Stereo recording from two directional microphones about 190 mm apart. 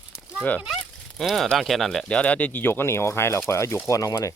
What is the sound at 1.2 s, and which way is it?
Speech, centre (ahead or behind).